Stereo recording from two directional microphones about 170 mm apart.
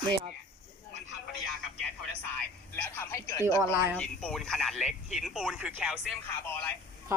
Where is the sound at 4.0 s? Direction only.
5° left (ahead or behind).